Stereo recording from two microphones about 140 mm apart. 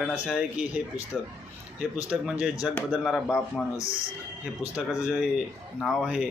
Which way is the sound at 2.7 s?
Centre (ahead or behind).